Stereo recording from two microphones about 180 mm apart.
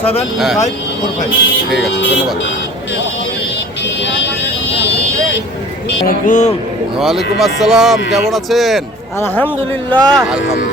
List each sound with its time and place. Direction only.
0.3 s speech: centre (ahead or behind)
6.1 s speech: 45° left (ahead or behind)
7.0 s speech: centre (ahead or behind)
9.2 s a man's voice: 10° left (ahead or behind)
9.9 s speech: centre (ahead or behind)